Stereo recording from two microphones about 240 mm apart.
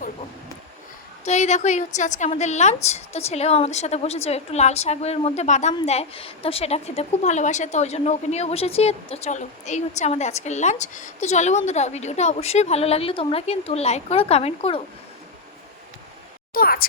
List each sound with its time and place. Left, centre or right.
1.2 s a woman's voice: left
16.6 s speech: left